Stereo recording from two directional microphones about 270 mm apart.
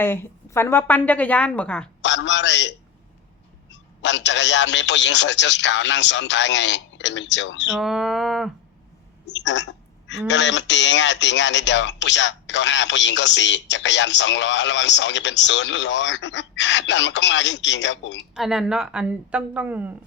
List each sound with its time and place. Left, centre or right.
0.0 s a woman's voice: centre
2.0 s a man's voice: left
7.7 s a woman's voice: centre
9.2 s speech: left
18.3 s a woman's voice: centre